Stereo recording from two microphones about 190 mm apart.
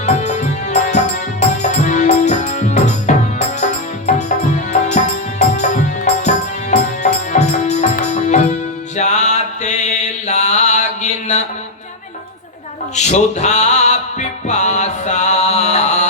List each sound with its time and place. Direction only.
0.0 s music: 40° left (ahead or behind)
9.0 s mantra: 35° left (ahead or behind)
13.0 s music: 35° left (ahead or behind)